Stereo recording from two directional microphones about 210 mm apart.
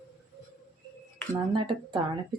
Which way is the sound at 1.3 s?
20° right (ahead or behind).